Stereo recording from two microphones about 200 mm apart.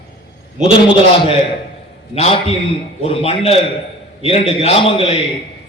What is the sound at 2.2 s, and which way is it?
A man's voice, 30° left (ahead or behind).